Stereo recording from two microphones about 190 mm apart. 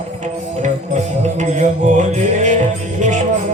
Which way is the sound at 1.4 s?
40° right (ahead or behind).